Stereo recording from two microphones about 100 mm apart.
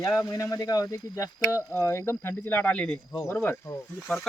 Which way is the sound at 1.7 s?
25° left (ahead or behind).